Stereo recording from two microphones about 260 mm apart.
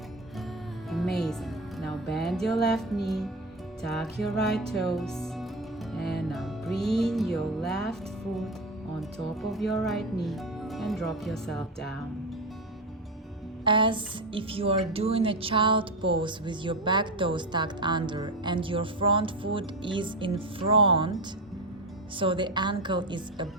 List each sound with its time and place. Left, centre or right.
0.9 s music: centre
2.6 s speech: centre
5.9 s music: centre
9.0 s speech: centre
13.7 s speech: centre
22.2 s a woman's voice: centre